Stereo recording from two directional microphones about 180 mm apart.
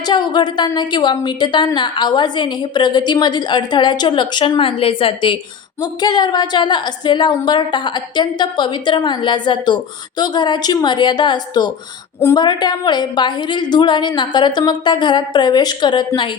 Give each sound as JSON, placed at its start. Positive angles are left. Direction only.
{"t": 0.0, "sound": "a woman's voice", "side_deg": 25}